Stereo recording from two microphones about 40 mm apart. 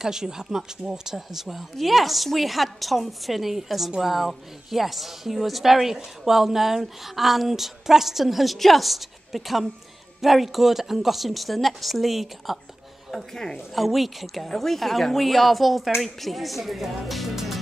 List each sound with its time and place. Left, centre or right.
0.0 s a woman's voice: centre
13.1 s speech: centre
13.7 s a woman's voice: centre